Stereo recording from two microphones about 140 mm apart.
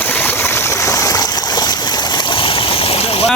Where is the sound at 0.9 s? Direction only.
25° left (ahead or behind).